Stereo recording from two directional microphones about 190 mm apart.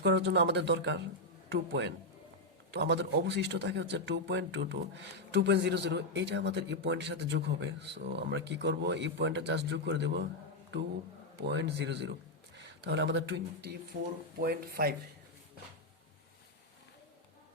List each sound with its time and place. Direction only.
0.0 s a man's voice: 65° right (ahead or behind)
11.3 s a man's voice: 60° right (ahead or behind)
13.9 s speech: 50° right (ahead or behind)